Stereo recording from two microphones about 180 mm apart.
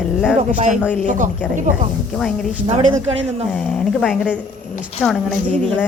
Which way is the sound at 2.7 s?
30° right (ahead or behind).